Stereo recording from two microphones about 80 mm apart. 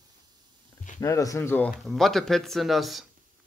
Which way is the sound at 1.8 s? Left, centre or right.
Centre.